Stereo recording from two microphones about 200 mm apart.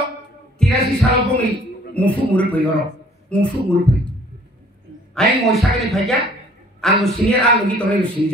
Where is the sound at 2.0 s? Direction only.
5° left (ahead or behind).